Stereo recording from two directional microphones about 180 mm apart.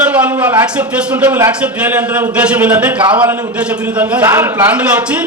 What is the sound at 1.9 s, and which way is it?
A man's voice, 5° right (ahead or behind).